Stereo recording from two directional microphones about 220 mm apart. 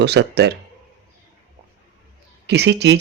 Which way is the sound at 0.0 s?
50° right (ahead or behind).